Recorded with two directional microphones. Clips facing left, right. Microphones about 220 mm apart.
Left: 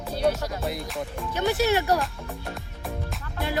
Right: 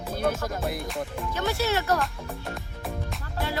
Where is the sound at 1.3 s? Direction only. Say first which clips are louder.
Left 5 dB; 15° left (ahead or behind).